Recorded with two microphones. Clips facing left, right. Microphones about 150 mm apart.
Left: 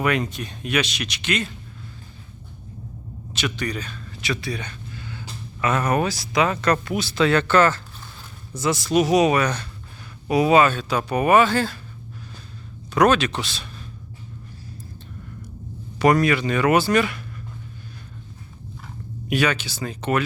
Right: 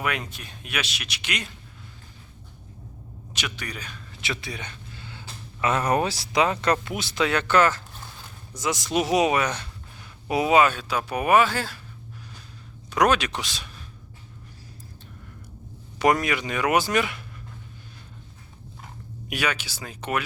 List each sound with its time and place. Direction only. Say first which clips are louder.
0.0 s speech: left 7 dB; 5° right (ahead or behind)
3.3 s speech: left 8 dB; 10° right (ahead or behind)
4.2 s a sound: left 5 dB; 20° right (ahead or behind)
5.9 s speech: left 1 dB; 30° right (ahead or behind); by 11.8 s 10° right (ahead or behind)
12.9 s speech: left 4 dB; 10° right (ahead or behind)
16.0 s speech: left 4 dB; 20° right (ahead or behind)
19.3 s speech: left 6 dB; 10° right (ahead or behind)